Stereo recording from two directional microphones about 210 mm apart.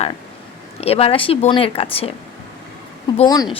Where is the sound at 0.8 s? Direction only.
30° left (ahead or behind).